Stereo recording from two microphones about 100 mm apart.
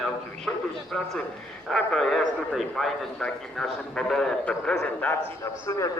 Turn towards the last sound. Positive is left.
turn(degrees=30)  # may be behind; listen again after turning